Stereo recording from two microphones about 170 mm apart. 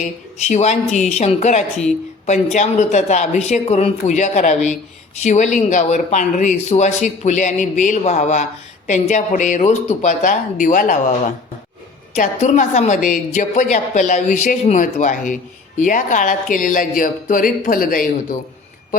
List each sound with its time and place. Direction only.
0.3 s speech: 40° left (ahead or behind)